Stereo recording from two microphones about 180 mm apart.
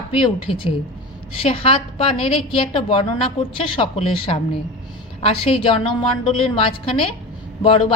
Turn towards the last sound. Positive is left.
turn(degrees=30)  # may be behind; listen again after turning